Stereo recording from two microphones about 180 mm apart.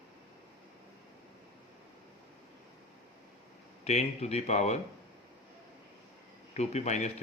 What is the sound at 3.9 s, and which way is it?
Speech, 40° left (ahead or behind).